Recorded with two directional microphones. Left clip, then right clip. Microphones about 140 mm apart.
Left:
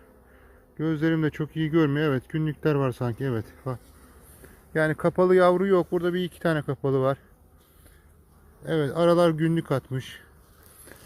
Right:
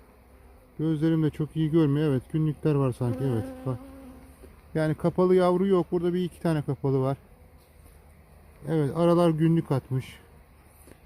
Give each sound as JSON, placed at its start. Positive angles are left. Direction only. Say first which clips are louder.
{"t": 0.8, "sound": "speech", "louder": "left 1 dB", "side_deg": -15}
{"t": 8.6, "sound": "speech", "louder": "left 2 dB", "side_deg": -20}